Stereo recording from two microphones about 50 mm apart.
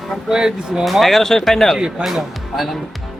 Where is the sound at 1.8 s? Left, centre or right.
Centre.